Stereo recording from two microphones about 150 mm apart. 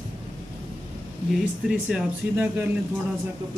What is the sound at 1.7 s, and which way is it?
Speech, 5° right (ahead or behind).